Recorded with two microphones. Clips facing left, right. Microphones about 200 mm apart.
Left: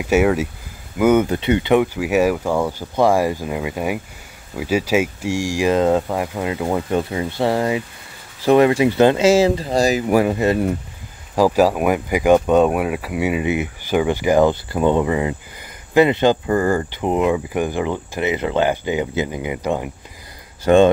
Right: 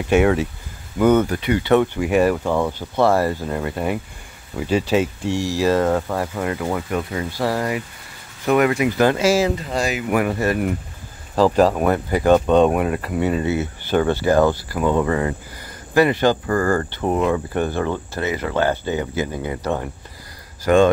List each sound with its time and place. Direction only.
0.0 s speech: 5° left (ahead or behind)
1.3 s speech: 25° left (ahead or behind)
1.8 s speech: 5° left (ahead or behind); by 10.2 s 35° left (ahead or behind)
10.2 s speech: 20° left (ahead or behind)
11.3 s speech: 10° left (ahead or behind)
20.6 s speech: 25° left (ahead or behind)